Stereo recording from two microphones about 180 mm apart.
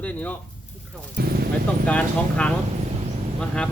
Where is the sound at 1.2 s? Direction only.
60° right (ahead or behind).